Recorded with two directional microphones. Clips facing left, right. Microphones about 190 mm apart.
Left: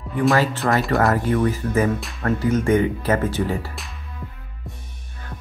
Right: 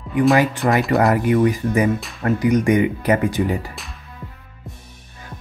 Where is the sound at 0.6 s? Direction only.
15° right (ahead or behind).